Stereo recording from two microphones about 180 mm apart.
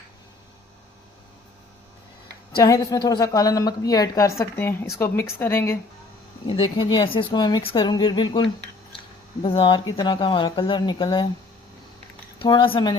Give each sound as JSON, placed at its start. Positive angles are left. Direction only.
{"t": 2.6, "sound": "a woman's voice", "side_deg": 20}
{"t": 6.5, "sound": "a woman's voice", "side_deg": 30}
{"t": 12.4, "sound": "a woman's voice", "side_deg": 25}